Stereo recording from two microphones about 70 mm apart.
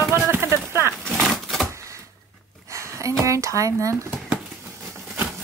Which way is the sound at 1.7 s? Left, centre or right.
Right.